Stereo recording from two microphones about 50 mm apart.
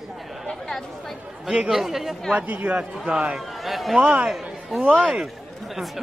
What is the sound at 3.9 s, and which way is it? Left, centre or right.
Speech, right.